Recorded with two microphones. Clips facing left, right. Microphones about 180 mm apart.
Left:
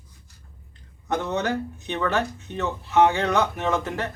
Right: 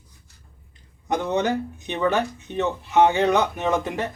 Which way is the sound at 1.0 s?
15° right (ahead or behind).